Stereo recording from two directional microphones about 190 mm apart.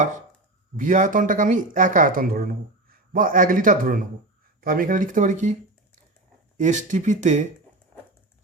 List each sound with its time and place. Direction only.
0.8 s speech: 45° right (ahead or behind)
6.6 s speech: 40° right (ahead or behind)